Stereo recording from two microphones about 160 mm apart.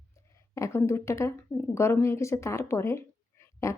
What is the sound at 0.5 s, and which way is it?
Speech, 15° left (ahead or behind).